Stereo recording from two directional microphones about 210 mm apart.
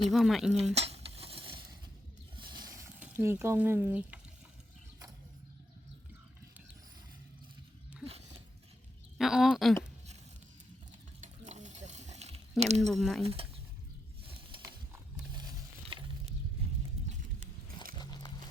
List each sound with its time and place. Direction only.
0.1 s speech: centre (ahead or behind)
0.7 s stir: 30° right (ahead or behind)
2.3 s a sound: 20° right (ahead or behind)
9.1 s speech: centre (ahead or behind)
11.2 s a sound: 35° right (ahead or behind)
12.9 s speech: centre (ahead or behind)
13.2 s speech: 30° right (ahead or behind)
14.5 s a sound: 25° right (ahead or behind)
17.9 s music: 20° left (ahead or behind)